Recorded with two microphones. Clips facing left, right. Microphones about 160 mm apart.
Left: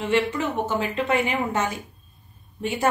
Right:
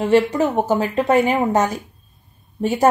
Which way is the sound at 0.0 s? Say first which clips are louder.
Right 7 dB; 40° right (ahead or behind).